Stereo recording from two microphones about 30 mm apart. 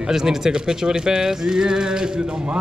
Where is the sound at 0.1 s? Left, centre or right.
Centre.